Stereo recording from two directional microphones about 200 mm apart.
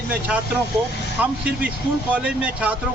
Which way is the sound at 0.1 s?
5° right (ahead or behind).